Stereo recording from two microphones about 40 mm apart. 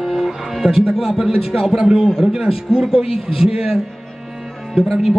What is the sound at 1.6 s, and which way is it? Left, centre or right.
A man's voice, centre.